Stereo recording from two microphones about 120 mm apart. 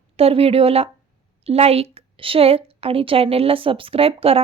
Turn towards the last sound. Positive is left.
turn(degrees=-55)  # may be behind; listen again after turning